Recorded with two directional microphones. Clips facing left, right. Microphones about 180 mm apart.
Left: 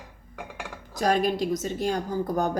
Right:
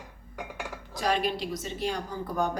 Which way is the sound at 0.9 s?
45° left (ahead or behind).